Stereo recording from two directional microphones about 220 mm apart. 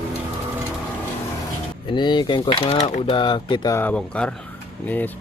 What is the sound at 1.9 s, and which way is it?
Speech, 20° left (ahead or behind).